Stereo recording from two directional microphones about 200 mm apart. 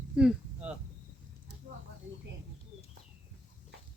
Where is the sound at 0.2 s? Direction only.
5° right (ahead or behind).